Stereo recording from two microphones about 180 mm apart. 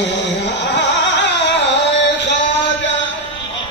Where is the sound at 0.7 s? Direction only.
75° left (ahead or behind).